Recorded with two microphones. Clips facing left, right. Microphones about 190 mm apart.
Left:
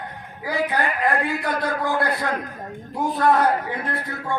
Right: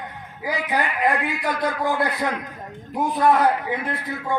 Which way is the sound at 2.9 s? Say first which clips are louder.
Right 1 dB; 20° right (ahead or behind).